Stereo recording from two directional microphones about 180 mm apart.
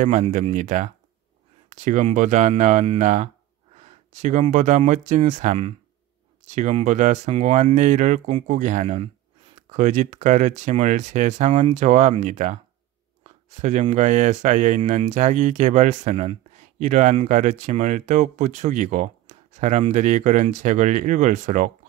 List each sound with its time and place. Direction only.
0.0 s speech: 45° right (ahead or behind)
13.6 s speech: 40° right (ahead or behind)